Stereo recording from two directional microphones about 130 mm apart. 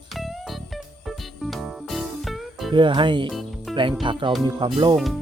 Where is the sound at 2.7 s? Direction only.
40° right (ahead or behind).